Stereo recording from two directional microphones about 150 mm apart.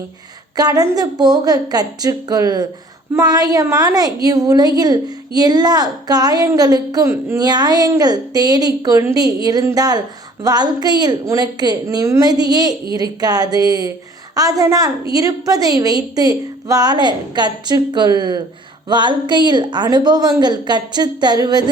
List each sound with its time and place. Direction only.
0.5 s a woman's voice: 25° right (ahead or behind)